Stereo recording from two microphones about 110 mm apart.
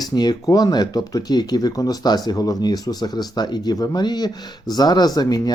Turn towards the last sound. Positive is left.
turn(degrees=35)  # may be behind; listen again after turning